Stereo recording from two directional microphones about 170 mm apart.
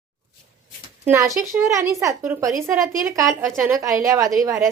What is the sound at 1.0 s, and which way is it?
A woman's voice, 15° right (ahead or behind).